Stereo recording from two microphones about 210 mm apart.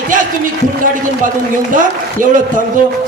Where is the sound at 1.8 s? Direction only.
40° right (ahead or behind).